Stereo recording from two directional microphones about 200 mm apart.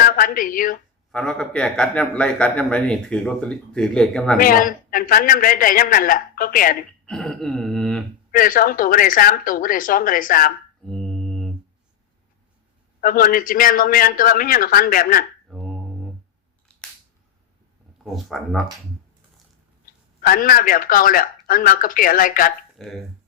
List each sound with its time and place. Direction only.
0.0 s a sound: 45° left (ahead or behind)
1.1 s a man's voice: 5° left (ahead or behind)
4.4 s a man's voice: 45° left (ahead or behind)
7.0 s a man's voice: 5° left (ahead or behind)
8.3 s a man's voice: 45° left (ahead or behind)
10.8 s mantra: 5° left (ahead or behind)
13.0 s a man's voice: 45° left (ahead or behind)
15.4 s a sound: centre (ahead or behind)
18.0 s a man's voice: centre (ahead or behind)
19.8 s speech: 45° left (ahead or behind)
22.8 s a man's voice: centre (ahead or behind)